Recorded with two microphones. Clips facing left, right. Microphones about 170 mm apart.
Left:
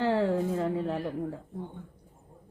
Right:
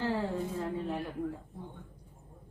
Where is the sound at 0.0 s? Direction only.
70° left (ahead or behind).